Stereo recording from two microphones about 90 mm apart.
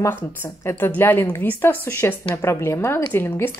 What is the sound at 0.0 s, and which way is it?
A woman's voice, 30° left (ahead or behind).